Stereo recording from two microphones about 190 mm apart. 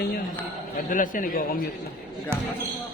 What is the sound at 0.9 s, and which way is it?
Speech, 45° left (ahead or behind).